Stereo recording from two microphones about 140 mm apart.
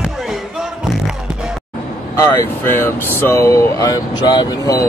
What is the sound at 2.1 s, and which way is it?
Speech, 15° left (ahead or behind).